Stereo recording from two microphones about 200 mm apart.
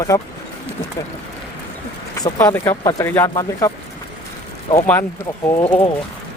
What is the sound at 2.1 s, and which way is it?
Speech, 15° left (ahead or behind).